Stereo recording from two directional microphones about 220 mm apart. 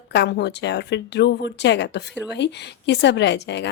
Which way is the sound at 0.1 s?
50° left (ahead or behind).